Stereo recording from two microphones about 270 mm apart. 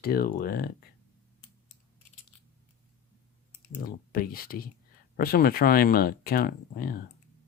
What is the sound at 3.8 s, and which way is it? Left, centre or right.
Speech, left.